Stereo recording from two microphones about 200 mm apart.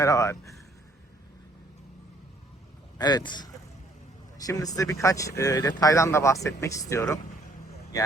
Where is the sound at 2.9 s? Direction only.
20° left (ahead or behind).